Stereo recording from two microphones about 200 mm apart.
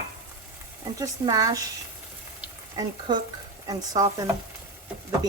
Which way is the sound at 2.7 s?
20° right (ahead or behind).